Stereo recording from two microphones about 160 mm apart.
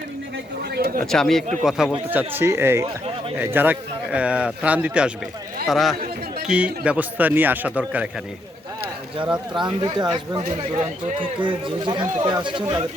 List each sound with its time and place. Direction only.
0.6 s speech: 90° right
1.1 s speech: 5° left (ahead or behind)
9.2 s speech: 5° right (ahead or behind)
9.8 s a man's voice: 25° right (ahead or behind)